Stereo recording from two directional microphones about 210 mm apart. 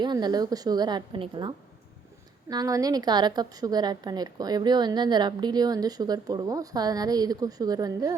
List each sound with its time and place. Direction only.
0.0 s a woman's voice: 20° right (ahead or behind)